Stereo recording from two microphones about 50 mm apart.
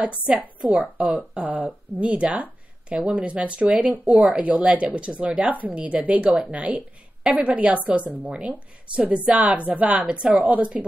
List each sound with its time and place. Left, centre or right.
0.6 s a woman's voice: centre
1.0 s a woman's voice: right